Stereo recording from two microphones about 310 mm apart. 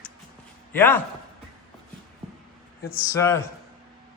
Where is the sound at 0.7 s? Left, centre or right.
Centre.